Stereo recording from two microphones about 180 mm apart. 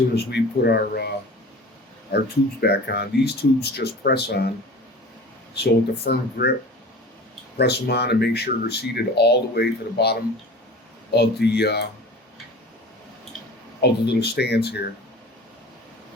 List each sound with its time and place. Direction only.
0.3 s speech: 65° left (ahead or behind)
2.1 s speech: 65° left (ahead or behind)
5.5 s speech: 60° left (ahead or behind)
7.6 s speech: 65° left (ahead or behind)
13.8 s speech: 65° left (ahead or behind)